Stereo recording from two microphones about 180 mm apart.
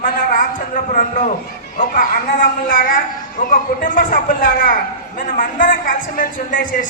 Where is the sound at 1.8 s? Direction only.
50° left (ahead or behind).